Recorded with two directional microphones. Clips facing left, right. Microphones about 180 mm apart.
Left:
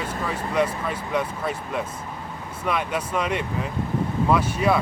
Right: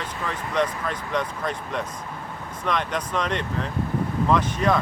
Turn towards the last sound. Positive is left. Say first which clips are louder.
# left 1 dB
turn(degrees=10)  # may be behind; listen again after turning